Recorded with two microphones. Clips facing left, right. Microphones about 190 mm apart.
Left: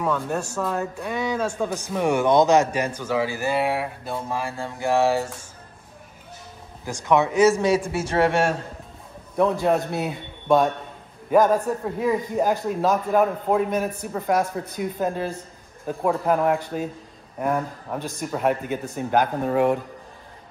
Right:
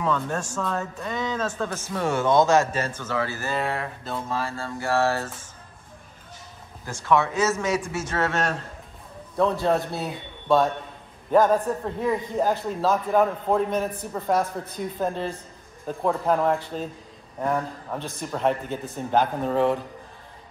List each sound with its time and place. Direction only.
0.0 s speech: 10° left (ahead or behind)
6.9 s a man's voice: 15° left (ahead or behind)